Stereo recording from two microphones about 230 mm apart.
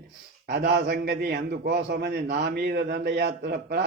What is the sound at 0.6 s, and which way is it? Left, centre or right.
A man's voice, right.